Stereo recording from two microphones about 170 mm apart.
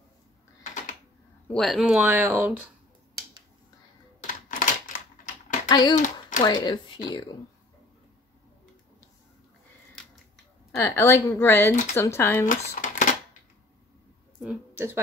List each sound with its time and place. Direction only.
1.5 s speech: centre (ahead or behind)
4.3 s typewriter: 50° left (ahead or behind)
5.7 s a child's voice: 25° left (ahead or behind)
11.0 s a woman's voice: 15° left (ahead or behind)
12.4 s a sound: 50° left (ahead or behind)
14.4 s a woman's voice: 10° right (ahead or behind)